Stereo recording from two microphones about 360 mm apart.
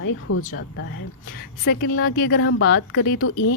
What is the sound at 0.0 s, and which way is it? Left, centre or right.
Speech, left.